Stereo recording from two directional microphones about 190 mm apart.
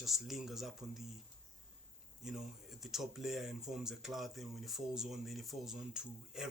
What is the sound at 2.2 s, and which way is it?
Speech, 5° right (ahead or behind).